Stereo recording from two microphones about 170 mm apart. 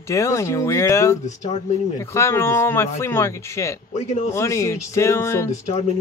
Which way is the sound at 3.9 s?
40° left (ahead or behind).